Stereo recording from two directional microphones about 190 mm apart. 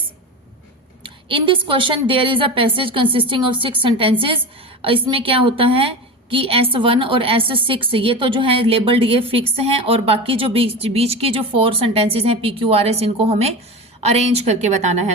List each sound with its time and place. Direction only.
1.0 s a woman's voice: 25° right (ahead or behind)